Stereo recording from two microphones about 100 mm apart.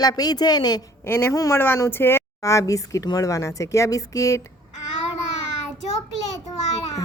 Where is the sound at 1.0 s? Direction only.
25° left (ahead or behind).